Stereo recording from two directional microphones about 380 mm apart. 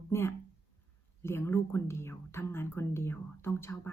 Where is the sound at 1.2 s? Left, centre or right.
Centre.